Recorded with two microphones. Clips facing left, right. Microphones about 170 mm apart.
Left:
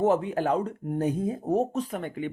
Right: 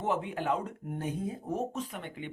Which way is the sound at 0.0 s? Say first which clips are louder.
Left 8 dB; 40° left (ahead or behind).